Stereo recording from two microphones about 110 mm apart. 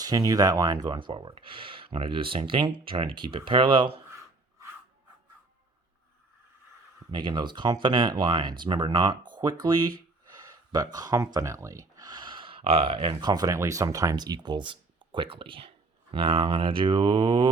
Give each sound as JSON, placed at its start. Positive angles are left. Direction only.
{"t": 0.0, "sound": "speech", "side_deg": -35}
{"t": 7.1, "sound": "speech", "side_deg": -45}
{"t": 10.4, "sound": "a sound", "side_deg": -35}
{"t": 12.6, "sound": "speech", "side_deg": -60}
{"t": 13.3, "sound": "speech", "side_deg": -30}